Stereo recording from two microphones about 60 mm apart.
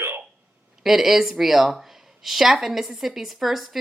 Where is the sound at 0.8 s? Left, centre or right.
Centre.